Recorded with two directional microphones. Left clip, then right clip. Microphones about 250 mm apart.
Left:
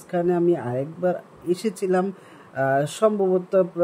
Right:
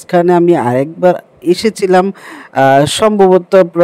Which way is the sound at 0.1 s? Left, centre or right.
Right.